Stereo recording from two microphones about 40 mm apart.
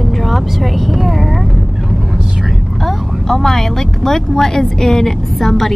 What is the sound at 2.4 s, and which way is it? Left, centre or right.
Speech, centre.